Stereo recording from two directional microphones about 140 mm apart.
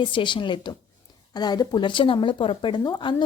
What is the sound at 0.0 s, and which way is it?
Speech, 35° left (ahead or behind).